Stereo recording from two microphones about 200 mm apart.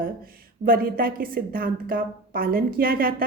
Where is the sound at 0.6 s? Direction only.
45° right (ahead or behind).